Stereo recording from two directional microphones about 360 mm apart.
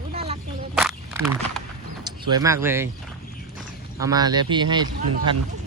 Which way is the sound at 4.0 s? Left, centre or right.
Centre.